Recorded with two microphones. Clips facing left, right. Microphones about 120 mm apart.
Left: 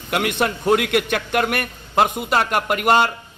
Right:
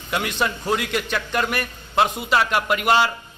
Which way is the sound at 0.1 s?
60° left (ahead or behind).